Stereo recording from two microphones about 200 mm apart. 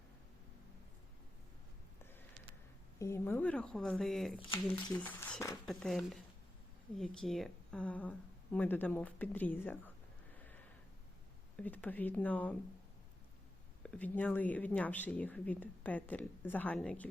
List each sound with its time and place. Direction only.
3.0 s speech: 10° left (ahead or behind)
4.4 s speech: 25° left (ahead or behind)
4.7 s speech: 5° left (ahead or behind)
11.5 s speech: 10° left (ahead or behind)
13.8 s speech: 5° left (ahead or behind)